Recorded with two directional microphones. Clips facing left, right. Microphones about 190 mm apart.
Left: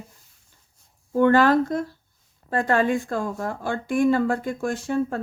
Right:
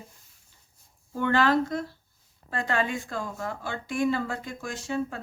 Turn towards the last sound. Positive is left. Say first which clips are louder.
# left 6 dB
turn(degrees=55)  # may be behind; listen again after turning